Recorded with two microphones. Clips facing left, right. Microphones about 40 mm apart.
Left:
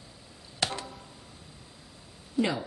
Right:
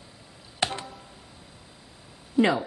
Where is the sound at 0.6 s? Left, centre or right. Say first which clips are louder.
Right 3 dB; right.